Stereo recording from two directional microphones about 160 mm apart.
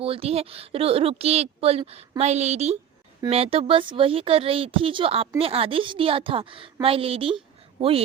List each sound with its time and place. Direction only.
0.0 s a man's voice: 35° right (ahead or behind)